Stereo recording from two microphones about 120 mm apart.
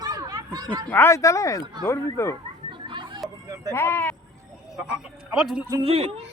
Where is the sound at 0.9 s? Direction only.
20° left (ahead or behind).